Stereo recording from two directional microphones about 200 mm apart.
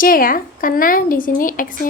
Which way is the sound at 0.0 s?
45° left (ahead or behind).